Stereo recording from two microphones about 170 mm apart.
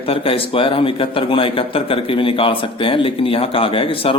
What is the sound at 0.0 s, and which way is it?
A man's voice, 35° left (ahead or behind).